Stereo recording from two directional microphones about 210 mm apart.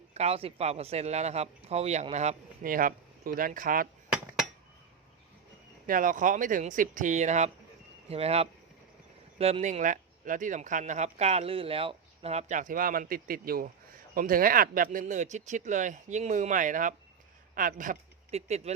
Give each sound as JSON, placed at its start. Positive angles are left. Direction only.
{"t": 0.1, "sound": "speech", "side_deg": -30}
{"t": 5.8, "sound": "speech", "side_deg": -40}